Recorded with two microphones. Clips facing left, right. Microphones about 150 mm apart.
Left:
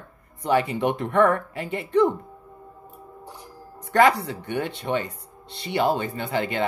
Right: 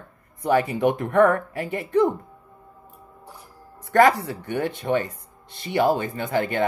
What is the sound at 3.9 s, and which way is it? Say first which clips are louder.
Speech: right 1 dB; 45° right (ahead or behind).